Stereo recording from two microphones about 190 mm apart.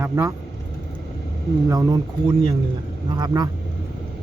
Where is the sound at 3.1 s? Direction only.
20° right (ahead or behind).